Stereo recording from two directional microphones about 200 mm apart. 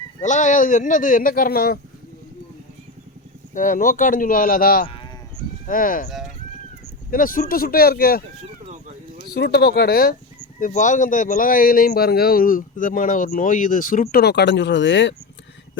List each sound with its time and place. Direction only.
0.2 s speech: 40° left (ahead or behind)
3.5 s a man's voice: 40° left (ahead or behind)
6.1 s speech: centre (ahead or behind)
6.8 s speech: 45° left (ahead or behind)
9.3 s a man's voice: 55° left (ahead or behind)
10.6 s a man's voice: 40° left (ahead or behind); by 15.1 s 65° left (ahead or behind)